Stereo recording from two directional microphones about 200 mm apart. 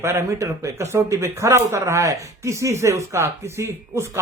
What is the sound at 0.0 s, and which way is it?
A man's voice, 10° right (ahead or behind).